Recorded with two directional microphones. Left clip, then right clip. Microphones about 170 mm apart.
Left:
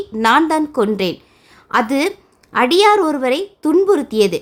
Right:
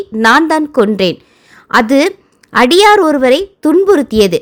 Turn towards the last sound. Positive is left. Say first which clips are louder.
# right 5 dB
turn(degrees=-25)  # may be behind; listen again after turning